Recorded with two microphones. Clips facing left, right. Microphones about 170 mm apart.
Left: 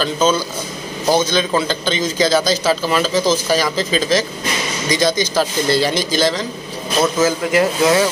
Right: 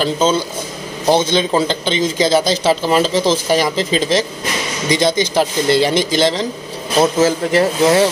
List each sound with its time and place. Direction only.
0.0 s a man's voice: 20° right (ahead or behind)